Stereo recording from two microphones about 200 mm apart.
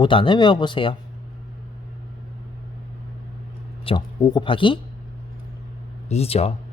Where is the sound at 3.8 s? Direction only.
20° left (ahead or behind).